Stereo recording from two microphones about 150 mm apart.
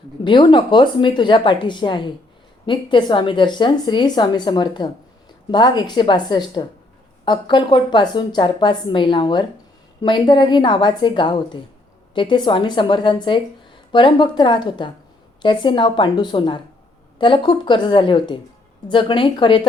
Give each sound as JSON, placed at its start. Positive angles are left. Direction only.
{"t": 0.3, "sound": "a woman's voice", "side_deg": 30}